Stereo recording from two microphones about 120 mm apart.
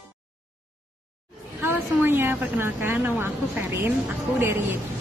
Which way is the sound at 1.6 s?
20° right (ahead or behind).